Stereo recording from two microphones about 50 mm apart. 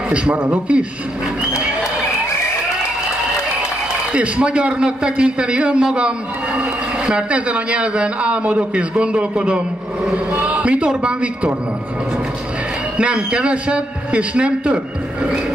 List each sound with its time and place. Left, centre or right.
0.1 s a man's voice: right
4.1 s a man's voice: right
12.9 s a man's voice: right